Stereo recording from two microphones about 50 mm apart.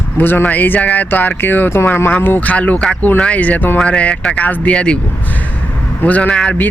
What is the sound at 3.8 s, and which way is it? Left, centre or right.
Speech, left.